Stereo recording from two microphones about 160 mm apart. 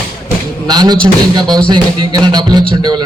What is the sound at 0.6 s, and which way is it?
A man's voice, 25° right (ahead or behind).